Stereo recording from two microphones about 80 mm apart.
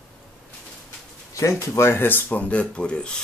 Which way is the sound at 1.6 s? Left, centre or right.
Left.